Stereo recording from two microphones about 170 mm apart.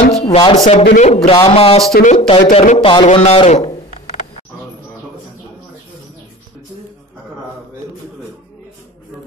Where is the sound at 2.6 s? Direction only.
45° left (ahead or behind).